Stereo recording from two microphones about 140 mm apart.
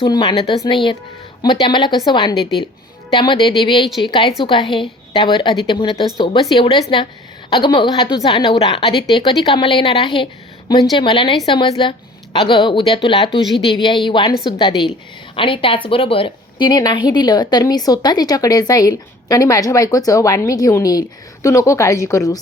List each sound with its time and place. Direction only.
0.0 s a woman's voice: 30° left (ahead or behind)